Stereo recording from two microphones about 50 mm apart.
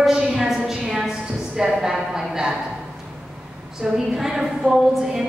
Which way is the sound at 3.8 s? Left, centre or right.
Centre.